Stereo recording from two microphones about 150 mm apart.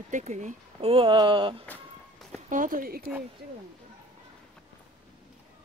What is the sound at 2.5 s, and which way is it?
Speech, 65° right (ahead or behind).